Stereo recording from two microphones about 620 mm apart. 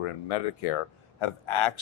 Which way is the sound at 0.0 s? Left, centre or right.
Left.